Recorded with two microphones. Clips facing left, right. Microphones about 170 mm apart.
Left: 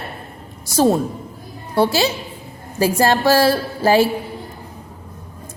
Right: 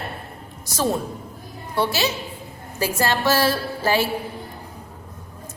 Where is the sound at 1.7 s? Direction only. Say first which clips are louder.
Left 6 dB; 40° left (ahead or behind).